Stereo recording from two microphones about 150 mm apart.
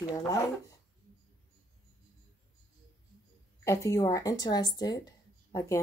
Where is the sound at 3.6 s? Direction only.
20° left (ahead or behind).